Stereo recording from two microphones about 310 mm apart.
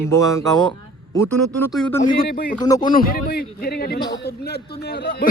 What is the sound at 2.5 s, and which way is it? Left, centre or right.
Speech, centre.